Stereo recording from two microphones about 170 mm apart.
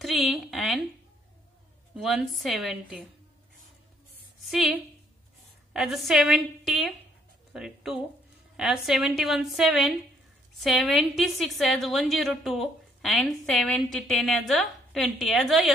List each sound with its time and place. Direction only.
0.0 s a sound: centre (ahead or behind)
2.0 s a woman's voice: centre (ahead or behind)
4.5 s a woman's voice: centre (ahead or behind)